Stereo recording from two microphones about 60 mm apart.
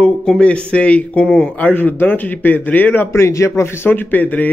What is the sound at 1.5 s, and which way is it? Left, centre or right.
A man's voice, left.